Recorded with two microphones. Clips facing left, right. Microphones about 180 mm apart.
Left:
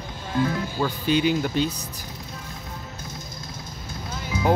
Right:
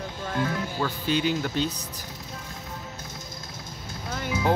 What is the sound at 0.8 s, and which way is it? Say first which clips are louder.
Speech: left 4 dB; 15° left (ahead or behind).